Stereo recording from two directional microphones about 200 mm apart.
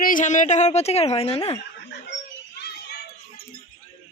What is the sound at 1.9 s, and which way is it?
Children playing, 60° left (ahead or behind).